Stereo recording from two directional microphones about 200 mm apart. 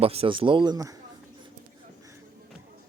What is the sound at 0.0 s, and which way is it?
Speech, 30° right (ahead or behind).